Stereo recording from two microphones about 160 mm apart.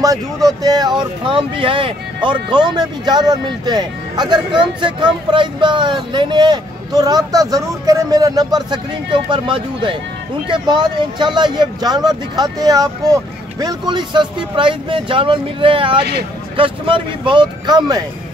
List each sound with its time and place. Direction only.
0.0 s speech: 20° right (ahead or behind)